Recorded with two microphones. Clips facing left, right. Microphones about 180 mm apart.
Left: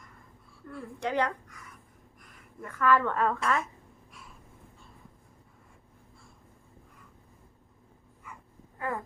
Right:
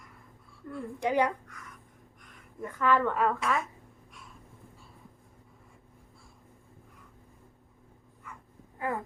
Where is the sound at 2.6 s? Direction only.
20° right (ahead or behind).